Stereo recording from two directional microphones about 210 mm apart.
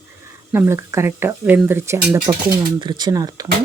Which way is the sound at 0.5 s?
10° right (ahead or behind).